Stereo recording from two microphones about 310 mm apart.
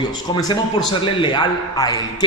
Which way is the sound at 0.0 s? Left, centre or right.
Centre.